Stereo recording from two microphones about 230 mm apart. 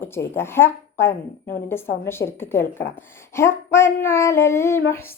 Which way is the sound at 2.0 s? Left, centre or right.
Centre.